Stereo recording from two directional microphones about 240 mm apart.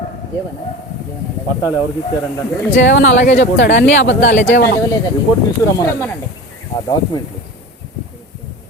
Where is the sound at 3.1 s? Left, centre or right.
Left.